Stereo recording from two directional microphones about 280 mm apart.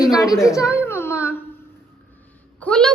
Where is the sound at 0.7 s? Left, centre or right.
Centre.